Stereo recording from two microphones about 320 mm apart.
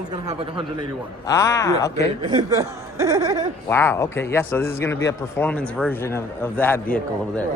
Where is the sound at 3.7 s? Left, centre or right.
Centre.